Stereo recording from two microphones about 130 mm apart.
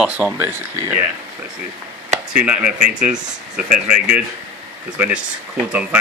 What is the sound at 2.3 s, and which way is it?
Speech, 10° right (ahead or behind).